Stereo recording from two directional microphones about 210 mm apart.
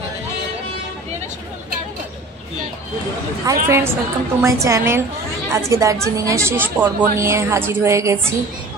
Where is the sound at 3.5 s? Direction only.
15° right (ahead or behind).